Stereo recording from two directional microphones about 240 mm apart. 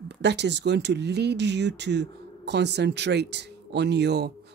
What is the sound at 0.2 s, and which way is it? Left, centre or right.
Speech, right.